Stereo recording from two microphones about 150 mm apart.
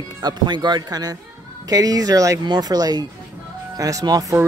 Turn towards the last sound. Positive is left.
turn(degrees=-25)  # may be behind; listen again after turning